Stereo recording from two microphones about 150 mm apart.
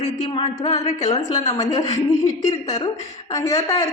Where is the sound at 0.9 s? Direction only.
50° left (ahead or behind).